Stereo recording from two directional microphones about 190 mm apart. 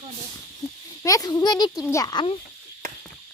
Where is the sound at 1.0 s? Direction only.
20° left (ahead or behind).